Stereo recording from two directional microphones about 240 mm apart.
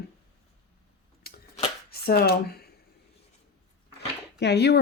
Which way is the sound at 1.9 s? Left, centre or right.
Left.